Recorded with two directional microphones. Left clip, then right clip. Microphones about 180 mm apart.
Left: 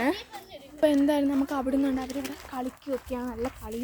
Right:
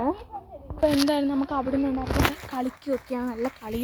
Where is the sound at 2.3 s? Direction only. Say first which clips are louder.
Right 4 dB; 40° right (ahead or behind).